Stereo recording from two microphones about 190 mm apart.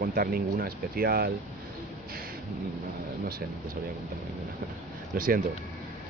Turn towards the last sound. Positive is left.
turn(degrees=-45)  # may be behind; listen again after turning